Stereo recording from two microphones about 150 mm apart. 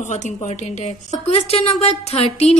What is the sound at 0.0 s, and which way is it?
A woman's voice, 55° left (ahead or behind).